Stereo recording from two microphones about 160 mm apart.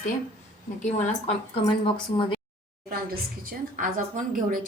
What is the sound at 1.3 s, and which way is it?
A woman's voice, 35° left (ahead or behind).